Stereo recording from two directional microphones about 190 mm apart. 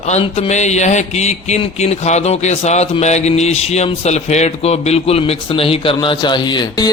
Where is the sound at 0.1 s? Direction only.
35° left (ahead or behind).